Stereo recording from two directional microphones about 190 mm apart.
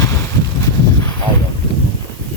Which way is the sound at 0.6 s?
15° left (ahead or behind).